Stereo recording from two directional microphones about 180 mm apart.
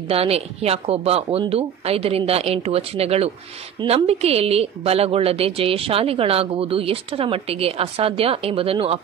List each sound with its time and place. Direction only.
0.1 s speech: 35° right (ahead or behind)